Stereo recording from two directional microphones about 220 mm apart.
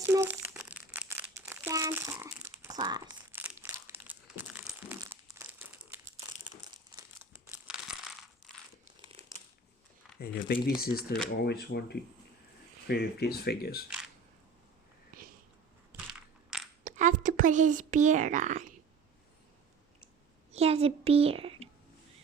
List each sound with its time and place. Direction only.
0.0 s crumpling: 10° right (ahead or behind)
7.5 s crumpling: 5° right (ahead or behind)
10.2 s speech: 45° left (ahead or behind)
16.8 s speech: 35° right (ahead or behind)
20.5 s a sound: 25° right (ahead or behind)